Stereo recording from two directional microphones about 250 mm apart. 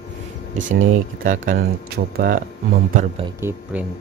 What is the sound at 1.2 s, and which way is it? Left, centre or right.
Speech, right.